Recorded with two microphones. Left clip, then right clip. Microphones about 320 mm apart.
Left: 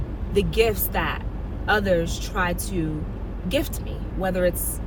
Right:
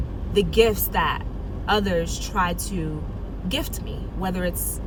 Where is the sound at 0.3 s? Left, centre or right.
Centre.